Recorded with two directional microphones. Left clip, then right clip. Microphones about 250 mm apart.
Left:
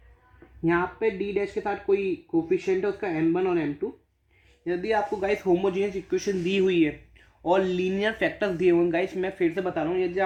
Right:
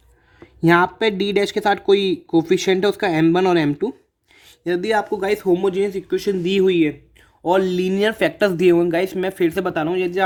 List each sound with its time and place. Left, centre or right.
0.6 s speech: right